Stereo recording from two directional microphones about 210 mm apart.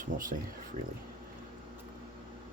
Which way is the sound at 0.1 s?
40° right (ahead or behind).